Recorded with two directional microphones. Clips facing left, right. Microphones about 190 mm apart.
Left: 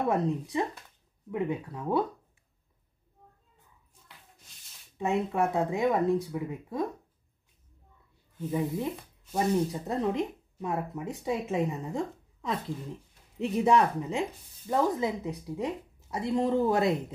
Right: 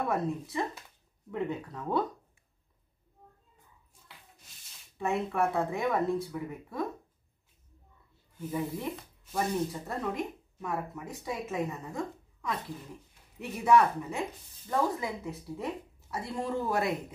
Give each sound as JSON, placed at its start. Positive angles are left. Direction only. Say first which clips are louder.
{"t": 0.0, "sound": "speech", "louder": "left 3 dB", "side_deg": 20}
{"t": 4.9, "sound": "speech", "louder": "left 2 dB", "side_deg": 20}
{"t": 8.4, "sound": "speech", "louder": "left 4 dB", "side_deg": 20}